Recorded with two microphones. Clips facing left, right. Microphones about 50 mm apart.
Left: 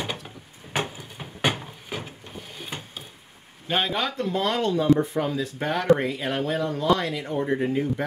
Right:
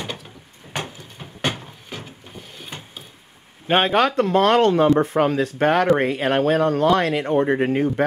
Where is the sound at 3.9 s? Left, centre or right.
Right.